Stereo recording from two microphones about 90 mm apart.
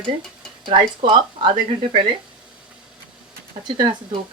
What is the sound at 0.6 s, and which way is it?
Speech, 65° right (ahead or behind).